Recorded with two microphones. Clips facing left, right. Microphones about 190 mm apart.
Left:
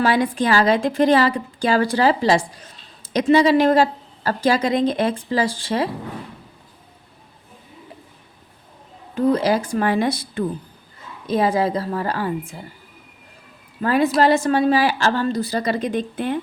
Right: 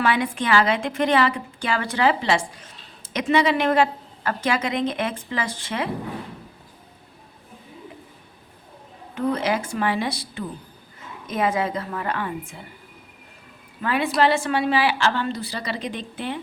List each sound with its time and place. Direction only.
0.0 s a woman's voice: 35° left (ahead or behind)
9.1 s a woman's voice: 35° left (ahead or behind)
11.3 s a woman's voice: 35° left (ahead or behind)
13.8 s a woman's voice: 40° left (ahead or behind)